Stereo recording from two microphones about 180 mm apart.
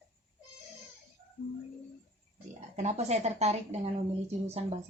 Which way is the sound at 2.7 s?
40° right (ahead or behind).